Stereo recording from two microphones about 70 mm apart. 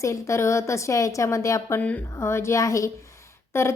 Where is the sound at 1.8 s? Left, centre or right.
Left.